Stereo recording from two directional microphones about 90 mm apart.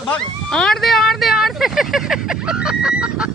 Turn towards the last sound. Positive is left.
turn(degrees=-10)  # may be behind; listen again after turning